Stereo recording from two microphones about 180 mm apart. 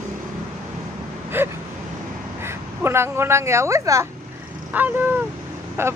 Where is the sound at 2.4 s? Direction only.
15° right (ahead or behind).